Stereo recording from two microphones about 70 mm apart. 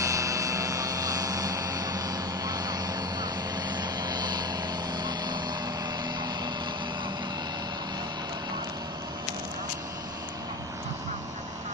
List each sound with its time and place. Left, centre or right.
0.0 s vehicle: right